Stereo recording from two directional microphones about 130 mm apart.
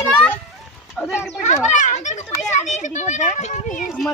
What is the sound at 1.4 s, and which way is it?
Children playing, 65° left (ahead or behind).